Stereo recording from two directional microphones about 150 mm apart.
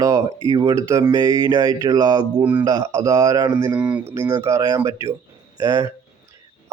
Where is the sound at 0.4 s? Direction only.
25° right (ahead or behind).